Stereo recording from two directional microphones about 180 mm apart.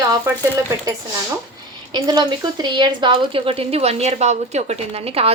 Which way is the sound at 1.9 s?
25° right (ahead or behind).